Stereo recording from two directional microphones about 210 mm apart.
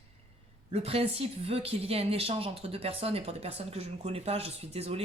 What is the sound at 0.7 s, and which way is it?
A woman's voice, 30° right (ahead or behind).